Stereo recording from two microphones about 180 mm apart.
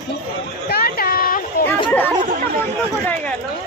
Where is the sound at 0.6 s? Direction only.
60° left (ahead or behind).